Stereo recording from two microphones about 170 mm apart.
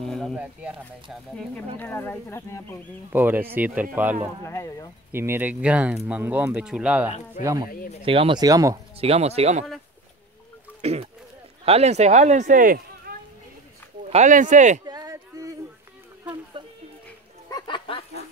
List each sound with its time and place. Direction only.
0.0 s speech: centre (ahead or behind)
1.8 s speech: 10° left (ahead or behind)
3.1 s speech: 10° right (ahead or behind)
4.5 s speech: 15° left (ahead or behind)
5.1 s speech: 15° right (ahead or behind)
7.4 s speech: 20° right (ahead or behind)
8.9 s speech: 35° right (ahead or behind)
10.8 s speech: 40° right (ahead or behind); by 13.1 s 55° right (ahead or behind)
14.1 s speech: 45° right (ahead or behind)
14.9 s a sound: 20° right (ahead or behind)
16.6 s a sound: 30° right (ahead or behind)
17.5 s a sound: 25° left (ahead or behind)